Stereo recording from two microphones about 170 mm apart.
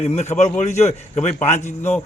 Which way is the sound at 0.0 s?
40° left (ahead or behind).